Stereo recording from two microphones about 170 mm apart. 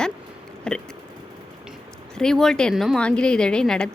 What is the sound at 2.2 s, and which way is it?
A woman's voice, 5° left (ahead or behind).